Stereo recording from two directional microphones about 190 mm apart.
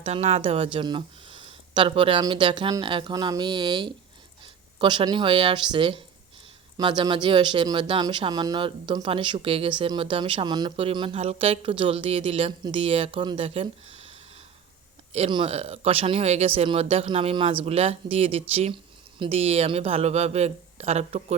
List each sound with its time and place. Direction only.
0.0 s speech: 35° right (ahead or behind)
15.1 s speech: 30° right (ahead or behind)